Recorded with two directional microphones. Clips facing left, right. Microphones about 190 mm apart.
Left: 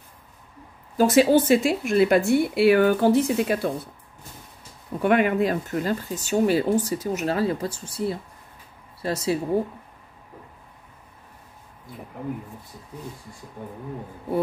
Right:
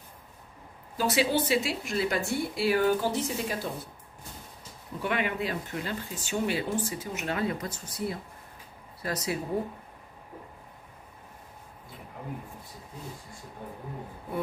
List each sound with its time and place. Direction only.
0.9 s speech: 45° left (ahead or behind); by 3.7 s 60° left (ahead or behind)
5.0 s speech: 50° left (ahead or behind); by 9.6 s 30° left (ahead or behind)